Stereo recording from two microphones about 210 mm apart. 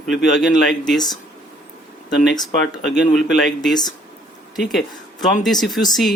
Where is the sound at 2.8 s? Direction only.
Centre (ahead or behind).